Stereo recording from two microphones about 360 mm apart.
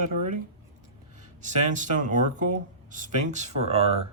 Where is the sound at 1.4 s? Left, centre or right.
Centre.